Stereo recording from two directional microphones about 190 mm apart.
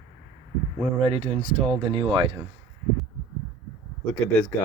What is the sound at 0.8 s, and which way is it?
Speech, 30° right (ahead or behind).